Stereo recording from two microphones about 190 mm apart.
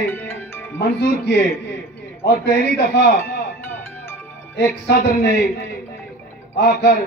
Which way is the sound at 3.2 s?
10° left (ahead or behind).